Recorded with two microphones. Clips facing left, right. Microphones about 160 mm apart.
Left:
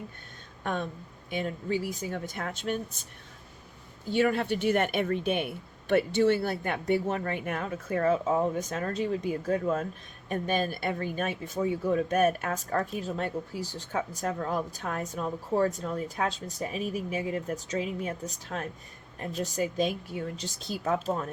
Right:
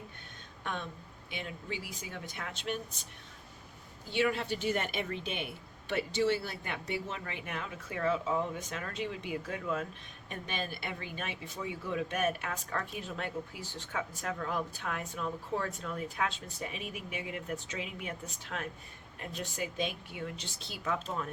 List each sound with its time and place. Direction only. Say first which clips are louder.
0.6 s speech: left 7 dB; 45° left (ahead or behind)
4.1 s speech: left 6 dB; 45° left (ahead or behind)